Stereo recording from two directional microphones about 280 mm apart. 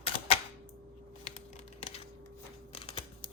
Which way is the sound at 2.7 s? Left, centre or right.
Centre.